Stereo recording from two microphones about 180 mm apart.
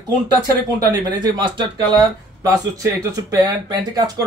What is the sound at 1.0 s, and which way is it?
Speech, 25° right (ahead or behind).